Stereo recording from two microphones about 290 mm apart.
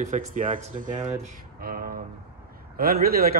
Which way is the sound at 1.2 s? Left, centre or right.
Right.